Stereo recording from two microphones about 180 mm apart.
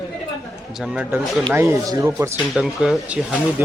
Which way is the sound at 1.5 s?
20° right (ahead or behind).